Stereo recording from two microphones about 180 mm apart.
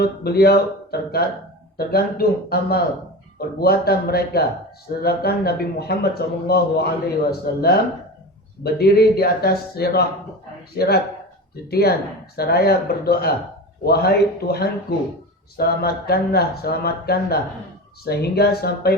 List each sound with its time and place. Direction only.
0.0 s speech: 60° left (ahead or behind)